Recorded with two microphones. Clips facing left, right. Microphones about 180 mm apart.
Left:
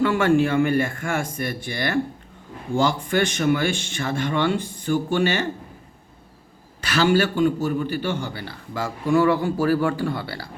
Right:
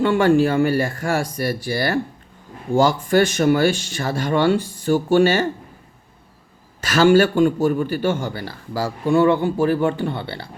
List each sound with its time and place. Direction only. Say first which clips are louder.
0.0 s a man's voice: right 3 dB; 30° right (ahead or behind)
6.8 s a man's voice: right 5 dB; 45° right (ahead or behind); by 10.5 s 25° right (ahead or behind)